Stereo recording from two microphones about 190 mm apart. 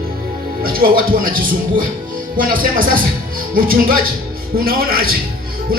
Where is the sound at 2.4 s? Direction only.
45° right (ahead or behind).